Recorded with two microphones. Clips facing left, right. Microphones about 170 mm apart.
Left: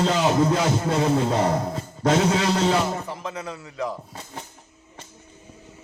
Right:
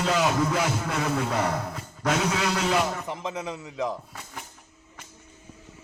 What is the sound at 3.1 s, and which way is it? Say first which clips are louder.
Speech: even; 20° right (ahead or behind).